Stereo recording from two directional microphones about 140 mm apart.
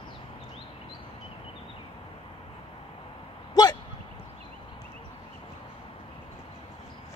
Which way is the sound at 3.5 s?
30° left (ahead or behind).